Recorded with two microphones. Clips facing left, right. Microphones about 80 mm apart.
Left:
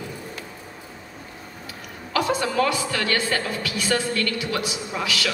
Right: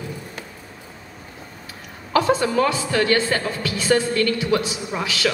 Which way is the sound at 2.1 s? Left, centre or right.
Right.